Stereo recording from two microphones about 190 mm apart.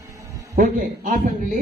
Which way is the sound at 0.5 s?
45° right (ahead or behind).